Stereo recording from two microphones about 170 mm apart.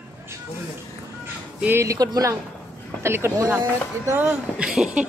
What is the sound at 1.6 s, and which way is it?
Speech, 10° right (ahead or behind).